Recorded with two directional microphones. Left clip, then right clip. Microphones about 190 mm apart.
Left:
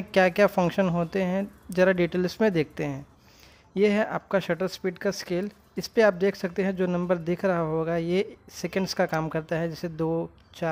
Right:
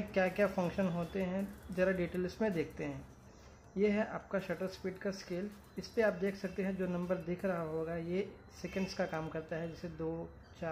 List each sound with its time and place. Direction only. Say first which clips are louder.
0.1 s speech: left 12 dB; 55° left (ahead or behind)